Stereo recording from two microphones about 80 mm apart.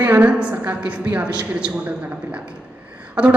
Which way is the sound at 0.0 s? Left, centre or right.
Right.